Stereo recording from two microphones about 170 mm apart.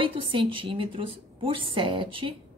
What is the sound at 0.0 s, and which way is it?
A woman's voice, 30° right (ahead or behind).